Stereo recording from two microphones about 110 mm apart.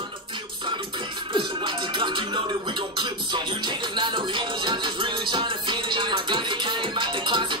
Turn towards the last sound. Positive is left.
turn(degrees=-45)  # may be behind; listen again after turning